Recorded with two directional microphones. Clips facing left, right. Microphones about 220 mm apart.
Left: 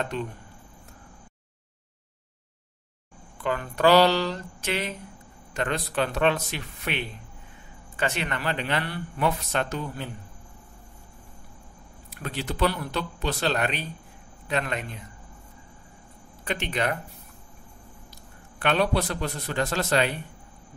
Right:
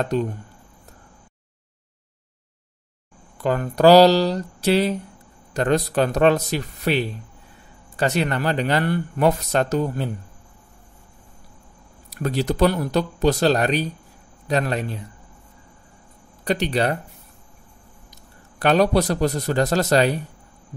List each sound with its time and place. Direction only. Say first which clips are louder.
0.0 s speech: right 8 dB; 40° right (ahead or behind)
3.3 s speech: right 7 dB; 40° right (ahead or behind)
12.1 s speech: right 10 dB; 40° right (ahead or behind)
16.4 s speech: right 7 dB; 35° right (ahead or behind)
18.6 s speech: right 7 dB; 40° right (ahead or behind)